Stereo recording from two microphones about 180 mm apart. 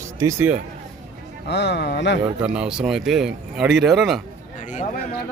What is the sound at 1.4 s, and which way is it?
Speech, 70° left (ahead or behind).